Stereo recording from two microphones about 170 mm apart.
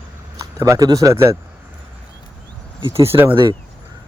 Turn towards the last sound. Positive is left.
turn(degrees=-30)  # may be behind; listen again after turning